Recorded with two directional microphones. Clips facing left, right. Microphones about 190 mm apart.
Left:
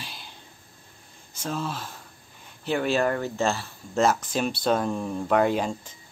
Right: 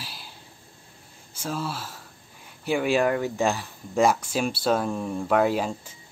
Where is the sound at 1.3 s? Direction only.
10° right (ahead or behind).